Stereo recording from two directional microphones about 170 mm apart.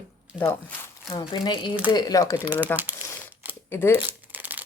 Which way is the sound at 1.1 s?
25° left (ahead or behind).